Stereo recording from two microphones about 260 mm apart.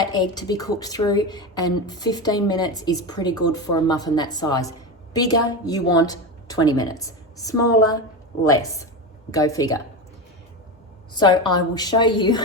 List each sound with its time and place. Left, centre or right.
0.0 s a woman's voice: centre
11.1 s speech: centre